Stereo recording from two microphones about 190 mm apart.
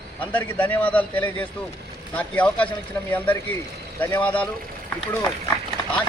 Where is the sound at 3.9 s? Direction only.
10° left (ahead or behind).